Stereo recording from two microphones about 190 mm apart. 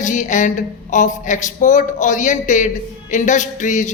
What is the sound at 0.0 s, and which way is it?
A woman's voice, 40° left (ahead or behind).